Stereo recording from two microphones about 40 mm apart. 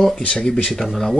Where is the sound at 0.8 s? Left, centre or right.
Centre.